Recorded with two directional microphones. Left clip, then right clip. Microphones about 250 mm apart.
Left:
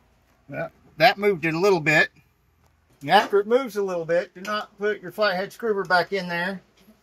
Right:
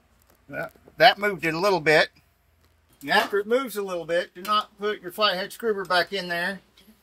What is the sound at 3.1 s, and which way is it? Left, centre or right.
Speech, centre.